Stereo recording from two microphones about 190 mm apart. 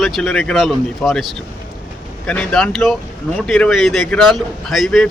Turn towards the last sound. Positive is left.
turn(degrees=0)  # may be behind; listen again after turning